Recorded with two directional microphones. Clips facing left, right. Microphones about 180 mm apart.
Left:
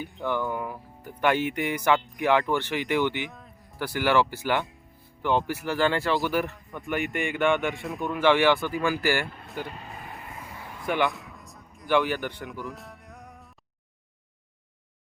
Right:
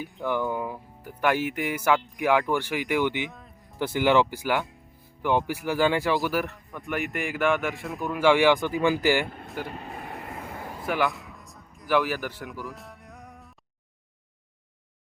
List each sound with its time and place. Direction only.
0.0 s speech: centre (ahead or behind)
0.3 s speech: 20° right (ahead or behind)
1.2 s speech: 5° right (ahead or behind)
3.0 s speech: 15° right (ahead or behind)
3.3 s a sound: centre (ahead or behind)
3.8 s speech: 20° right (ahead or behind)
6.1 s speech: centre (ahead or behind); by 9.2 s 20° right (ahead or behind)
9.6 s vehicle: 60° right (ahead or behind)
10.8 s a sound: centre (ahead or behind)